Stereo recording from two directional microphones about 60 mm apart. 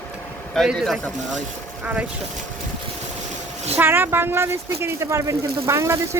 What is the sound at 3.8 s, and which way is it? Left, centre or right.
Speech, right.